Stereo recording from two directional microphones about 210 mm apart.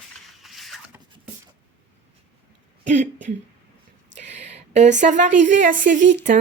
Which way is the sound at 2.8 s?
35° right (ahead or behind).